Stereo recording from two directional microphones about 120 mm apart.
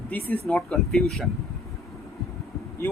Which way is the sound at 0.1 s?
15° left (ahead or behind).